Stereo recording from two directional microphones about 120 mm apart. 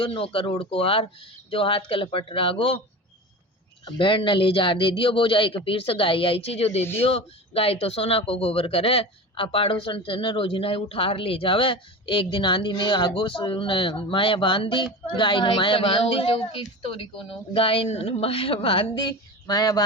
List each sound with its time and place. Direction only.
0.0 s speech: 50° left (ahead or behind)
3.8 s speech: 45° left (ahead or behind)
19.0 s speech: 35° left (ahead or behind)